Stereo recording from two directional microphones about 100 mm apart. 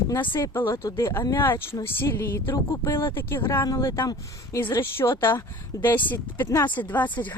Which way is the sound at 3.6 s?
35° left (ahead or behind).